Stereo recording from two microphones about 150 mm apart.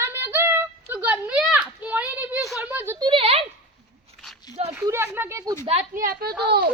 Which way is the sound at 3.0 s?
35° right (ahead or behind).